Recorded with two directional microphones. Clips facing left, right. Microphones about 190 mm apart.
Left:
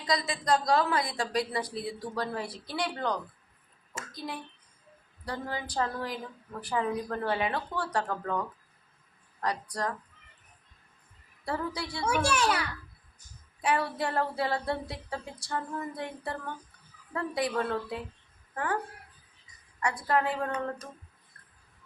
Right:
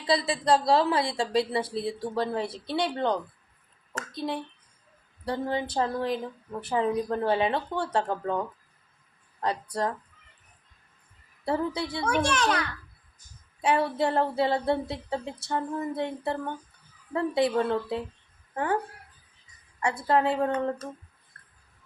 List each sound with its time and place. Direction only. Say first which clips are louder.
0.0 s a woman's voice: right 5 dB; 30° right (ahead or behind)
11.4 s a woman's voice: right 5 dB; 25° right (ahead or behind)
12.0 s a child's voice: right 1 dB; 10° left (ahead or behind)
13.6 s a woman's voice: right 4 dB; 25° right (ahead or behind)
19.8 s a woman's voice: right 4 dB; 25° right (ahead or behind)